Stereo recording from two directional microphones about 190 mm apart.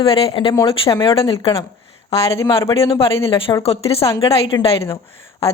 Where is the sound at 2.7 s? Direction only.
30° left (ahead or behind).